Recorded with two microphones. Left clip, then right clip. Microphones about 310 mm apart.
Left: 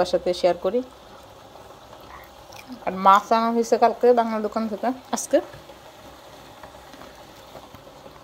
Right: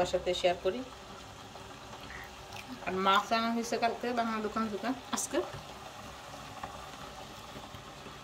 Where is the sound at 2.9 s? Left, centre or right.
Centre.